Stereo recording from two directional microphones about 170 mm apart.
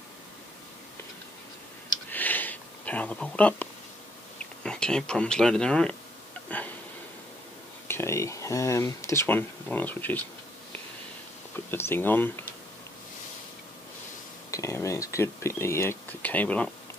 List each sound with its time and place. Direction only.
2.0 s a sound: 10° left (ahead or behind)
4.4 s speech: 5° left (ahead or behind)
7.9 s speech: 15° left (ahead or behind)
11.5 s speech: 15° left (ahead or behind)
14.5 s speech: 15° left (ahead or behind)